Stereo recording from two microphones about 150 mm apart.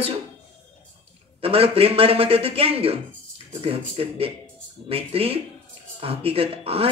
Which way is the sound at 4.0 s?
40° right (ahead or behind).